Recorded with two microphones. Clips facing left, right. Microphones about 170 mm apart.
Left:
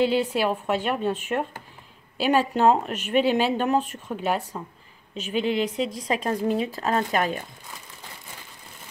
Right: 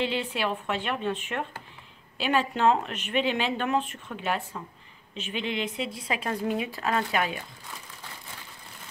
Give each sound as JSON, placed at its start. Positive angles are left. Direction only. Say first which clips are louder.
{"t": 0.0, "sound": "speech", "louder": "left 7 dB", "side_deg": 40}